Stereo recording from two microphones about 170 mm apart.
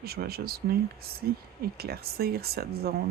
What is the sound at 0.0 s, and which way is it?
Speech, 65° right (ahead or behind).